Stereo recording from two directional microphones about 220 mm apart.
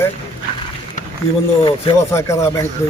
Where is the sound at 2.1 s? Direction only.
15° left (ahead or behind).